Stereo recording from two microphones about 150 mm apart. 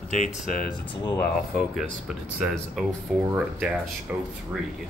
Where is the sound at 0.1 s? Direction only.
60° left (ahead or behind).